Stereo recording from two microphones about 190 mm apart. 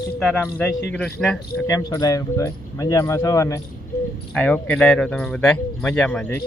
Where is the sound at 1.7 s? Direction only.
20° left (ahead or behind).